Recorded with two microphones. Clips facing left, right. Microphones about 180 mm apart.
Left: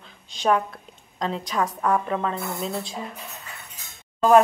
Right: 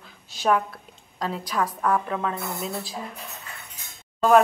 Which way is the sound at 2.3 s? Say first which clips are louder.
Left 2 dB; 25° left (ahead or behind).